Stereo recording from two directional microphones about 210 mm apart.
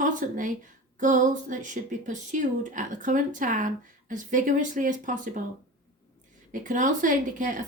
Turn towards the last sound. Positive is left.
turn(degrees=-40)  # may be behind; listen again after turning